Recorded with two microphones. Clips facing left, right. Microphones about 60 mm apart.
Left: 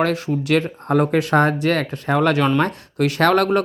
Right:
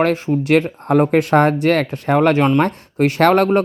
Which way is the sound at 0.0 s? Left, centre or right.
Right.